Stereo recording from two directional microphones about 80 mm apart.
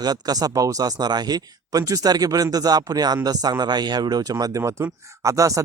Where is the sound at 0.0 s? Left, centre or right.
Right.